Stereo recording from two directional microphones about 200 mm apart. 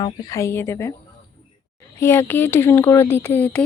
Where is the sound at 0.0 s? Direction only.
20° left (ahead or behind).